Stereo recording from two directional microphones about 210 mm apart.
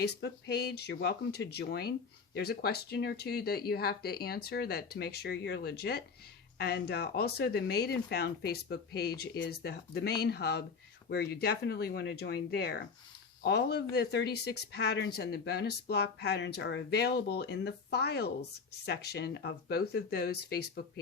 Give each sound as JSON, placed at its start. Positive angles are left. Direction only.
{"t": 0.0, "sound": "speech", "side_deg": 50}